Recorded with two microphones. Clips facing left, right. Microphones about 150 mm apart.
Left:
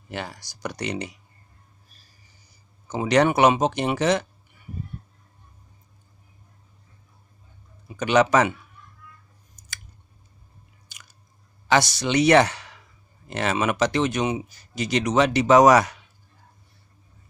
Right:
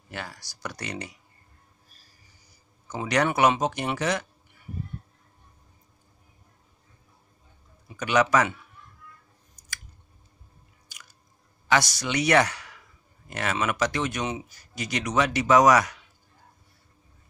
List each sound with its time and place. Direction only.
0.1 s speech: 20° left (ahead or behind)
2.9 s speech: 25° left (ahead or behind)
7.9 s speech: 25° left (ahead or behind)
10.9 s chewing: 25° left (ahead or behind)
11.6 s speech: 25° left (ahead or behind)